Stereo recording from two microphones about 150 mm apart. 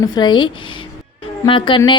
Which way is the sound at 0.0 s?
30° left (ahead or behind).